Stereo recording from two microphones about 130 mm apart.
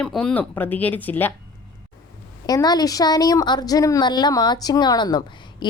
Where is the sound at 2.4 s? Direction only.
30° left (ahead or behind).